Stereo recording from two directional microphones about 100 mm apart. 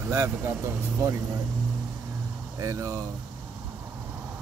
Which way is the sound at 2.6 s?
35° right (ahead or behind).